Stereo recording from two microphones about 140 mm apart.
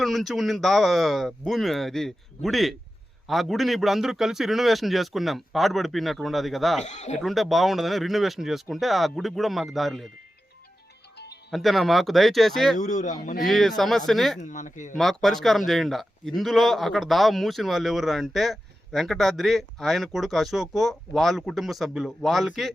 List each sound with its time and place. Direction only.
0.0 s a man's voice: centre (ahead or behind)
6.8 s speech: 55° left (ahead or behind)
7.2 s a man's voice: centre (ahead or behind)
11.5 s a man's voice: centre (ahead or behind)
12.8 s speech: 60° left (ahead or behind)
13.4 s a man's voice: centre (ahead or behind)
14.4 s speech: 65° left (ahead or behind)
14.9 s a man's voice: centre (ahead or behind)